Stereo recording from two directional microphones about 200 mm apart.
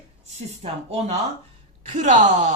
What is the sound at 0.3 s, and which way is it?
Speech, 30° right (ahead or behind).